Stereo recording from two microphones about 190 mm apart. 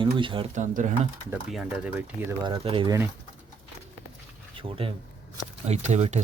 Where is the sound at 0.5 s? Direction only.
40° right (ahead or behind).